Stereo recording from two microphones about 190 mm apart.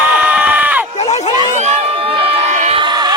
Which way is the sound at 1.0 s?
35° left (ahead or behind).